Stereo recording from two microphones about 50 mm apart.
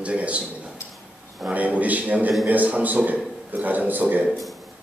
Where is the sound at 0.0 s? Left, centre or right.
Right.